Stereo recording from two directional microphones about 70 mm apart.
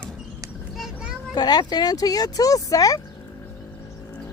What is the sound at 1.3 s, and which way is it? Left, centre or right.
Speech, left.